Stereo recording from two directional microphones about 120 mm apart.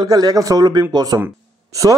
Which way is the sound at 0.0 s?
35° right (ahead or behind).